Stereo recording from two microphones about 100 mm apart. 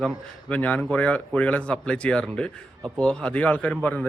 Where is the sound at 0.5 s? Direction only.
15° left (ahead or behind).